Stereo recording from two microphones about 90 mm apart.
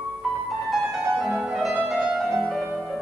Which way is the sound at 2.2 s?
5° left (ahead or behind).